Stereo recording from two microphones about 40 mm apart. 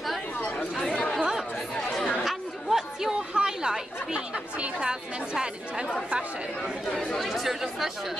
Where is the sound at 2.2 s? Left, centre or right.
Centre.